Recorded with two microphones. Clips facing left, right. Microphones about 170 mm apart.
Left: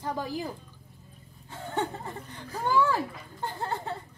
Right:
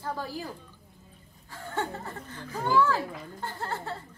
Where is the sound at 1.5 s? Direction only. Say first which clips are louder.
Left 2 dB; 20° left (ahead or behind).